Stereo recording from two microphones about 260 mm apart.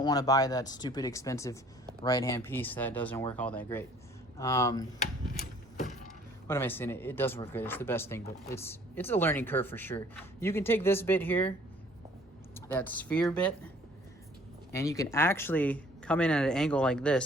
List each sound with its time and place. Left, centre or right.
0.0 s speech: centre
5.3 s a sound: left
6.5 s speech: centre
12.5 s speech: centre
14.7 s speech: centre